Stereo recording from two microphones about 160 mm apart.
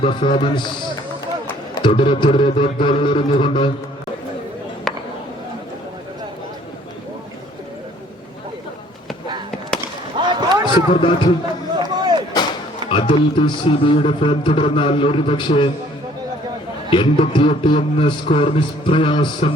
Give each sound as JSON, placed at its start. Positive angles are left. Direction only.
{"t": 0.0, "sound": "a man's voice", "side_deg": 30}
{"t": 1.7, "sound": "a man's voice", "side_deg": 30}
{"t": 10.2, "sound": "boat", "side_deg": -30}
{"t": 10.9, "sound": "a man's voice", "side_deg": 30}
{"t": 11.8, "sound": "a sound", "side_deg": -25}
{"t": 12.9, "sound": "a man's voice", "side_deg": 35}
{"t": 16.9, "sound": "a man's voice", "side_deg": 35}